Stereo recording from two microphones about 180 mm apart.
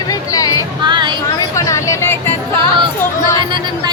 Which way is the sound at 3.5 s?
25° right (ahead or behind).